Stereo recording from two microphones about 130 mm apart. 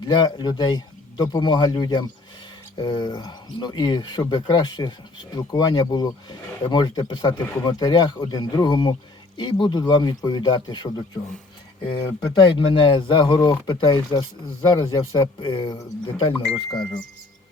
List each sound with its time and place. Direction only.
0.0 s speech: 35° left (ahead or behind)
11.9 s speech: 35° left (ahead or behind)